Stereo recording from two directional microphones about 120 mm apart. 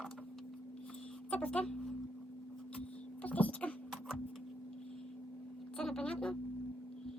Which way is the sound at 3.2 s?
15° left (ahead or behind).